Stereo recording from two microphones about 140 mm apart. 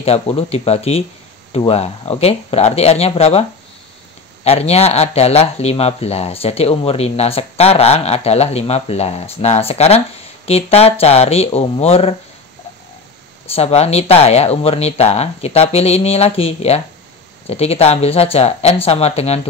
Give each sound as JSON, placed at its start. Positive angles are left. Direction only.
{"t": 0.0, "sound": "speech", "side_deg": 45}
{"t": 4.5, "sound": "speech", "side_deg": 45}
{"t": 13.6, "sound": "speech", "side_deg": 50}